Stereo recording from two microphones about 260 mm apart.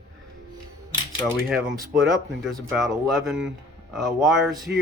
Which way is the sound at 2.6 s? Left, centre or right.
Centre.